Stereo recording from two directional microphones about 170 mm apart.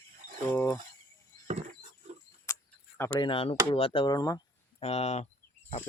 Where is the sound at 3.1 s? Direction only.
30° left (ahead or behind).